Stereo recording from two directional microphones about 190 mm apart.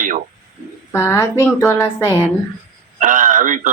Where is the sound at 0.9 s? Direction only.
15° left (ahead or behind).